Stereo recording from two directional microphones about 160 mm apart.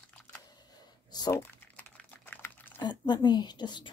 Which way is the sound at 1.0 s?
25° left (ahead or behind).